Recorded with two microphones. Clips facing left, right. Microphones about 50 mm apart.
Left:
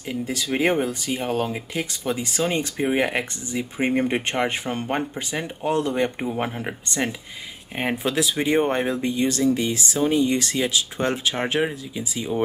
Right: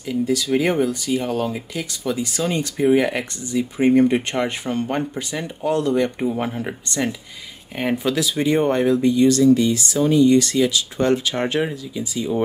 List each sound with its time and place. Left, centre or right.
0.0 s speech: left